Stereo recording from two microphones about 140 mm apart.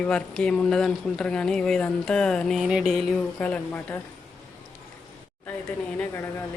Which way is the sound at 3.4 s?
10° left (ahead or behind).